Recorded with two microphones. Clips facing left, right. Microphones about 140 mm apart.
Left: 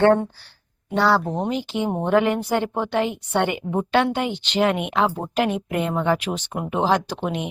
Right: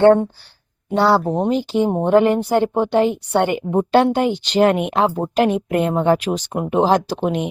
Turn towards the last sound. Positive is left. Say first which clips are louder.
# right 6 dB
turn(degrees=-35)  # may be behind; listen again after turning